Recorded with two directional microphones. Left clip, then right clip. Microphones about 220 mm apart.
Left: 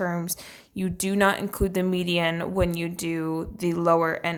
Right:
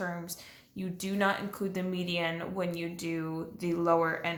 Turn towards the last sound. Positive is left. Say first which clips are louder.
# left 6 dB
turn(degrees=45)  # may be behind; listen again after turning